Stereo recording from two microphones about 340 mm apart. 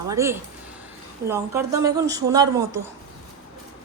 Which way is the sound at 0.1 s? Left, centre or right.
Centre.